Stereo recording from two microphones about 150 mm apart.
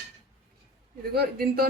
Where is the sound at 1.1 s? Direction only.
90° right.